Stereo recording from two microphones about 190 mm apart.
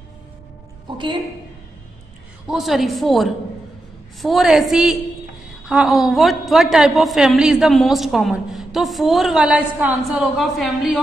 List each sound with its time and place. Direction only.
0.8 s a woman's voice: 25° right (ahead or behind)
2.5 s a woman's voice: centre (ahead or behind)